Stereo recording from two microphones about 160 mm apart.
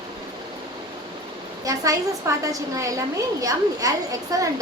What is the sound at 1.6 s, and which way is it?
A woman's voice, 20° right (ahead or behind).